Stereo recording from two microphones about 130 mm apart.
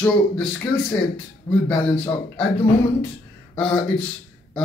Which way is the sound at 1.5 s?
25° left (ahead or behind).